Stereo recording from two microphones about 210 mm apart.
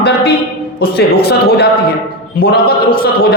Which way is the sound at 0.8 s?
50° left (ahead or behind).